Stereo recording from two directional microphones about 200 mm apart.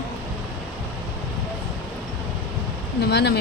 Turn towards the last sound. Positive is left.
turn(degrees=55)  # may be behind; listen again after turning